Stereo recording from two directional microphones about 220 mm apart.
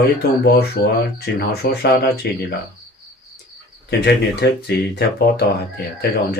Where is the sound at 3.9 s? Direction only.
50° left (ahead or behind).